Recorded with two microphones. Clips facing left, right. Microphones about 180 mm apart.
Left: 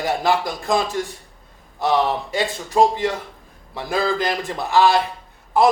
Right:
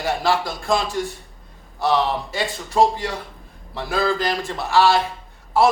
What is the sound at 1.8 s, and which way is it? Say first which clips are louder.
A man's voice: left 1 dB; 20° left (ahead or behind).